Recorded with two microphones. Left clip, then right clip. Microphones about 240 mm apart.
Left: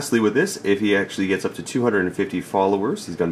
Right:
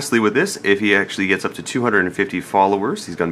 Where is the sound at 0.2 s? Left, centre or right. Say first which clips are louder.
Right 2 dB; right.